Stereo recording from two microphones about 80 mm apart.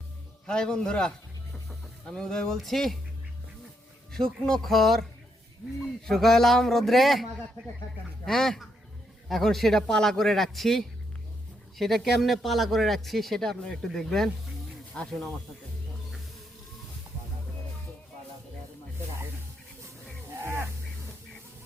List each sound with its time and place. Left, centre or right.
0.4 s a man's voice: centre
4.1 s speech: centre
6.1 s speech: centre
15.0 s a man's voice: centre
20.4 s a sound: right